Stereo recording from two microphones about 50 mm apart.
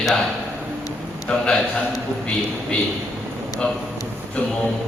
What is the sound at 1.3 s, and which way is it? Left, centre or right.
Speech, centre.